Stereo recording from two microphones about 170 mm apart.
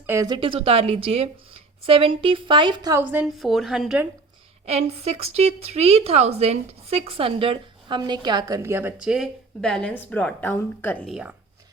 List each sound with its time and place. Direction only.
0.0 s speech: 15° right (ahead or behind)
0.3 s speech: 30° right (ahead or behind)
3.0 s a woman's voice: 10° right (ahead or behind)
4.6 s a woman's voice: 40° right (ahead or behind); by 11.1 s 10° left (ahead or behind)
11.1 s a woman's voice: 5° right (ahead or behind)